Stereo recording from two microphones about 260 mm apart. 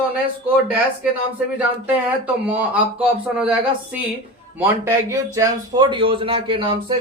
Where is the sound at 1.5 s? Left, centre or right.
Centre.